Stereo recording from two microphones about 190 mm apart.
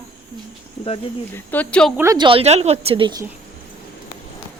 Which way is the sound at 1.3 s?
10° left (ahead or behind).